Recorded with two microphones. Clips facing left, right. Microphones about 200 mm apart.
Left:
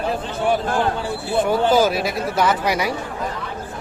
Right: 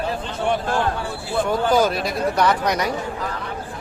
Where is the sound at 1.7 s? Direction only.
5° left (ahead or behind).